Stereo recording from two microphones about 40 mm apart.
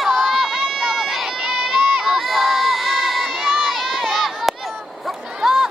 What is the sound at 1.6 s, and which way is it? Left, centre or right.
Crowd, centre.